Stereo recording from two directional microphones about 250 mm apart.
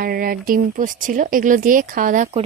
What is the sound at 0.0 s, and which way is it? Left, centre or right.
Speech, right.